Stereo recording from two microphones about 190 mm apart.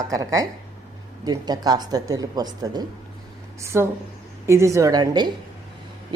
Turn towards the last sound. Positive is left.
turn(degrees=-20)  # may be behind; listen again after turning